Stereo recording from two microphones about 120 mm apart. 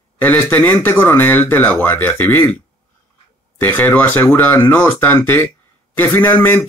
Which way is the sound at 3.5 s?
15° left (ahead or behind).